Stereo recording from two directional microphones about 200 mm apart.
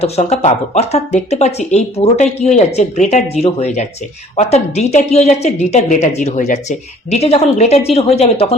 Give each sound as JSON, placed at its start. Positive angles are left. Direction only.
{"t": 0.0, "sound": "speech", "side_deg": 30}